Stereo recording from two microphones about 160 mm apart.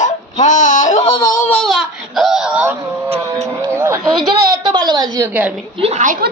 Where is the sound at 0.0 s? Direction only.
50° left (ahead or behind).